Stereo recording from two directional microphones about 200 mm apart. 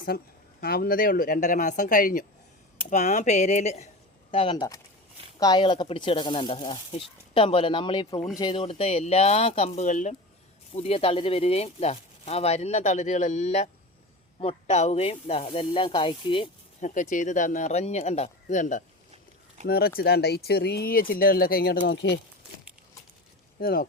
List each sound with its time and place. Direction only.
0.1 s speech: 50° left (ahead or behind); by 16.5 s 25° left (ahead or behind)
16.8 s speech: 40° left (ahead or behind)
19.6 s speech: 50° left (ahead or behind)
23.6 s speech: 50° left (ahead or behind)